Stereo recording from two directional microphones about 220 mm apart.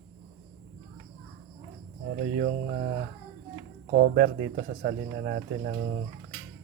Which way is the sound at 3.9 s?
45° right (ahead or behind).